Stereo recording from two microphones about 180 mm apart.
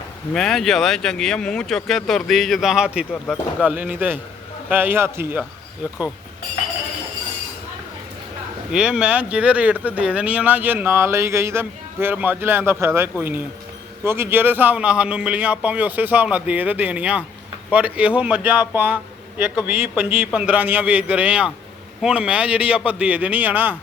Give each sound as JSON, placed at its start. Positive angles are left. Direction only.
{"t": 0.3, "sound": "speech", "side_deg": 0}
{"t": 8.7, "sound": "speech", "side_deg": -5}